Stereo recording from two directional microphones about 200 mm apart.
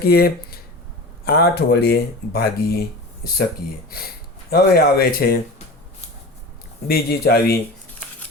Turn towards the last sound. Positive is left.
turn(degrees=50)  # may be behind; listen again after turning